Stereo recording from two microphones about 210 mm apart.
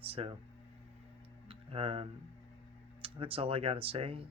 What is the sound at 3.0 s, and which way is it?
Speech, 25° right (ahead or behind).